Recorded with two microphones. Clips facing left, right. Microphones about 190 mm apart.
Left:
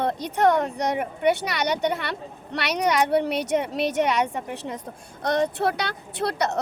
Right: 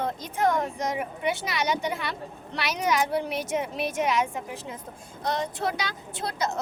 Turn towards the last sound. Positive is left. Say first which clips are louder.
# left 5 dB
turn(degrees=65)  # may be behind; listen again after turning